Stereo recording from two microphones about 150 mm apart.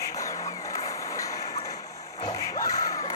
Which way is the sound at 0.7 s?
20° left (ahead or behind).